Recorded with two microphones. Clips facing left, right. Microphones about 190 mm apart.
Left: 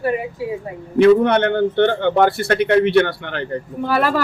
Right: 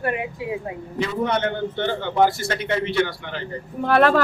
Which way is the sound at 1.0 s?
60° left (ahead or behind).